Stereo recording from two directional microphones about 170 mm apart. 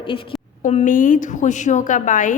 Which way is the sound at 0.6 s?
45° left (ahead or behind).